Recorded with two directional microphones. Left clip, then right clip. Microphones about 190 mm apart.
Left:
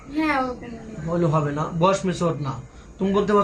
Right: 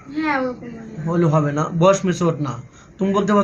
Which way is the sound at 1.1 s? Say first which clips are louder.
Right 4 dB; 50° right (ahead or behind).